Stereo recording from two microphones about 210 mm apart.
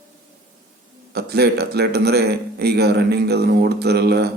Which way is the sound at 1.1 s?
50° right (ahead or behind).